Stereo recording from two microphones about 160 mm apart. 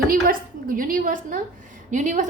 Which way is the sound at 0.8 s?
60° right (ahead or behind).